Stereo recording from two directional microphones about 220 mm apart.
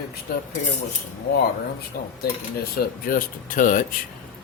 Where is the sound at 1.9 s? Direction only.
40° left (ahead or behind).